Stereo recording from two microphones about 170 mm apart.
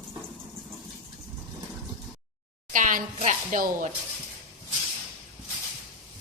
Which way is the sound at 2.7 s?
50° right (ahead or behind).